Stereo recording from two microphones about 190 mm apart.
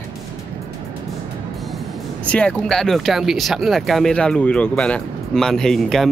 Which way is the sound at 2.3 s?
5° left (ahead or behind).